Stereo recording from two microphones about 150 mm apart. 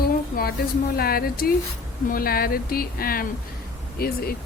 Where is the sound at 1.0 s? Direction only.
90° left.